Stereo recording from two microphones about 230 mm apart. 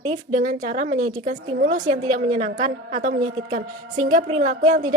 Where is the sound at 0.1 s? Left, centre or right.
Right.